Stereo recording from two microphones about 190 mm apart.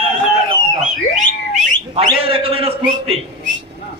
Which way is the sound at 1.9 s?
30° right (ahead or behind).